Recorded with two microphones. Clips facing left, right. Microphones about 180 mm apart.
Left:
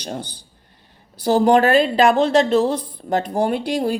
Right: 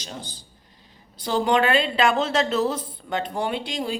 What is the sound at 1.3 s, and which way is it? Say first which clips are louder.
Speech: left 6 dB; 40° left (ahead or behind).